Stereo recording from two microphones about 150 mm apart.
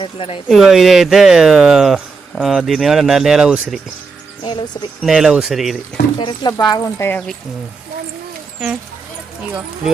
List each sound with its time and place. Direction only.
0.0 s speech: 40° left (ahead or behind)
0.4 s speech: centre (ahead or behind)
4.4 s speech: 30° left (ahead or behind)
5.0 s speech: 5° right (ahead or behind)
6.1 s speech: 30° left (ahead or behind)